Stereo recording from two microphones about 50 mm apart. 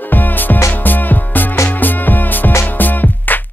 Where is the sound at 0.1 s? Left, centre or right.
Left.